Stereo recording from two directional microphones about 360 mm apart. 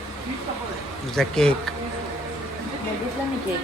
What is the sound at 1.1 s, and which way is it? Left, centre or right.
Speech, centre.